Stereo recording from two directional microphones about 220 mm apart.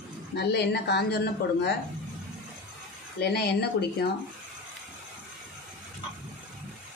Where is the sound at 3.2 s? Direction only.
45° left (ahead or behind).